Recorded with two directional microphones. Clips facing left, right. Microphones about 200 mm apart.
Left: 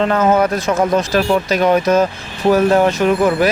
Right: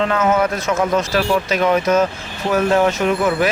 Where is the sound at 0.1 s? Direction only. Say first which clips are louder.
Left 3 dB; 35° left (ahead or behind).